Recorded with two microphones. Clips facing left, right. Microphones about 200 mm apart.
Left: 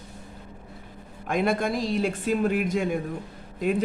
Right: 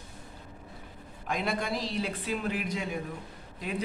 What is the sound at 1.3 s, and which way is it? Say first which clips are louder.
A woman's voice: left 7 dB; 50° left (ahead or behind).